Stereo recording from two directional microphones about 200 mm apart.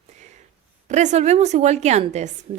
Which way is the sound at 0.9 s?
35° right (ahead or behind).